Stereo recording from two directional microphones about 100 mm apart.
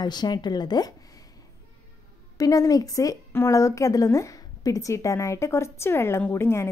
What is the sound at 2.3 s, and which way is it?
A woman's voice, 35° left (ahead or behind).